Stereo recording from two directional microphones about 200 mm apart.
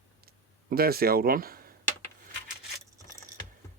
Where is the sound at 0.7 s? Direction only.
50° right (ahead or behind).